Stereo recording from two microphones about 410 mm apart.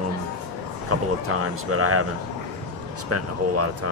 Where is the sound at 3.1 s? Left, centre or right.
Right.